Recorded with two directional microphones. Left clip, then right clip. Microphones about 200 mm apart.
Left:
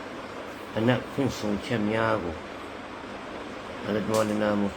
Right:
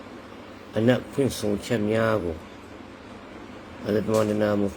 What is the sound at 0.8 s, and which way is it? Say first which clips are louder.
Speech: right 3 dB; 40° right (ahead or behind).